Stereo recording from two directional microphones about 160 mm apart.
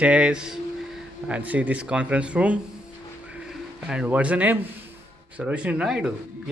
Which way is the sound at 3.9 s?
5° right (ahead or behind).